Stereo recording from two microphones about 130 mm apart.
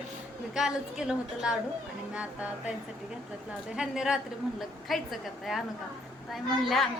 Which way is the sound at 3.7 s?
5° right (ahead or behind).